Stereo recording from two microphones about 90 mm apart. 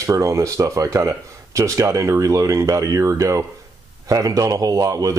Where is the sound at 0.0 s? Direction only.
40° right (ahead or behind).